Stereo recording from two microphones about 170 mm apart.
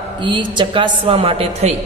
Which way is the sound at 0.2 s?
30° right (ahead or behind).